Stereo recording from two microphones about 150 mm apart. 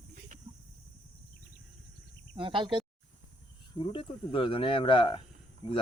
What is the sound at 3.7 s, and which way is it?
Speech, 35° left (ahead or behind).